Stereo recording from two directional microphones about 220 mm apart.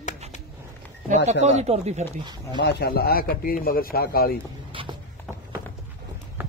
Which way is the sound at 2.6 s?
45° left (ahead or behind).